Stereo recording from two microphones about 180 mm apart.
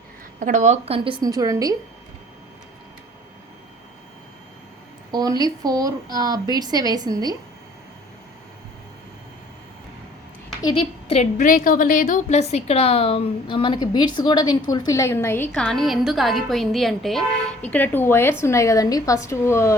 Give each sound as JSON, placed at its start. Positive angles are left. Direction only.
{"t": 0.3, "sound": "speech", "side_deg": -45}
{"t": 5.1, "sound": "speech", "side_deg": -20}
{"t": 10.6, "sound": "a woman's voice", "side_deg": 25}
{"t": 11.1, "sound": "a woman's voice", "side_deg": 40}